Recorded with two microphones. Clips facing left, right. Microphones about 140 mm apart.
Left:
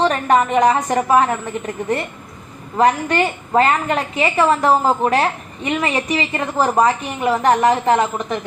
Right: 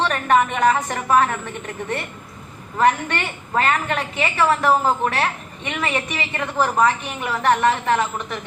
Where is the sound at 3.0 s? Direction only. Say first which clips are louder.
Left 8 dB; 35° left (ahead or behind).